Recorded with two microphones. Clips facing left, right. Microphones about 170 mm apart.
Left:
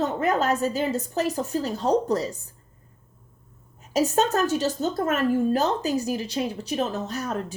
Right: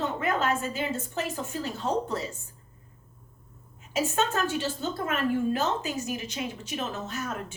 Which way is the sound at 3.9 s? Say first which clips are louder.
Left 5 dB; 40° left (ahead or behind).